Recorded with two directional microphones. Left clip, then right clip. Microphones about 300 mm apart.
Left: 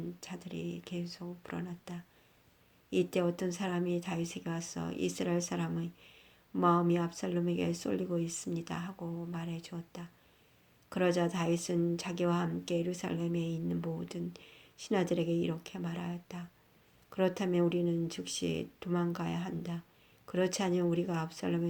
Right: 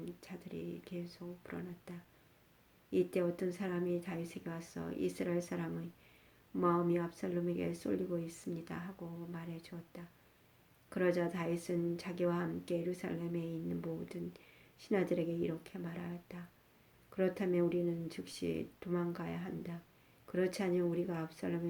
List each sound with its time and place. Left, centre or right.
0.2 s speech: left